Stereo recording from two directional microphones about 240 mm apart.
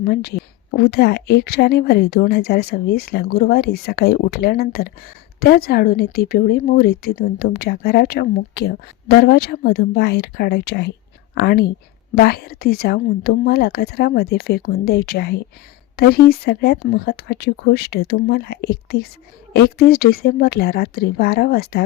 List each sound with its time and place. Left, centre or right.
0.0 s a woman's voice: left